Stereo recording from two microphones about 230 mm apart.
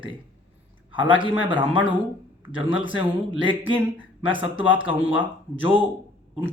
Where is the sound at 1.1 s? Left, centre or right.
Right.